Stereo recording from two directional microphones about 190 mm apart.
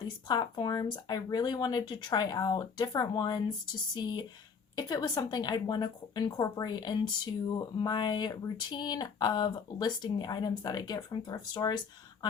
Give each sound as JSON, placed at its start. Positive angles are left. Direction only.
{"t": 0.3, "sound": "a woman's voice", "side_deg": 20}